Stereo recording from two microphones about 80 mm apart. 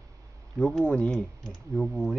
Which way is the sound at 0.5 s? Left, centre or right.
Centre.